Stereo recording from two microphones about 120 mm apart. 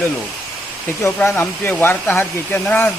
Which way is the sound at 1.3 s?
15° left (ahead or behind).